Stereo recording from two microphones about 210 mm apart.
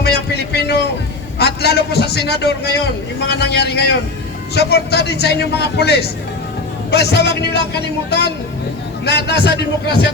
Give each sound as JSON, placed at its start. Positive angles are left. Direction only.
{"t": 0.0, "sound": "a sound", "side_deg": 50}
{"t": 1.4, "sound": "a man's voice", "side_deg": 50}
{"t": 9.0, "sound": "a man's voice", "side_deg": 50}